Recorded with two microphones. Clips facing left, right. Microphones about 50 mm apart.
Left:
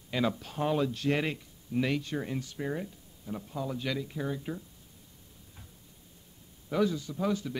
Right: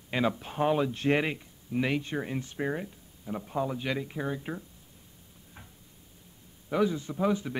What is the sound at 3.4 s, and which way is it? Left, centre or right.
A man's voice, right.